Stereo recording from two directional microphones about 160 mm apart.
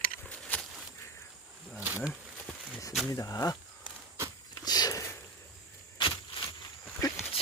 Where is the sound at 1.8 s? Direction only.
10° right (ahead or behind).